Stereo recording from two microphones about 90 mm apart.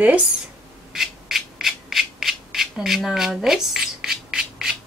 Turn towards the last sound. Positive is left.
turn(degrees=-5)  # may be behind; listen again after turning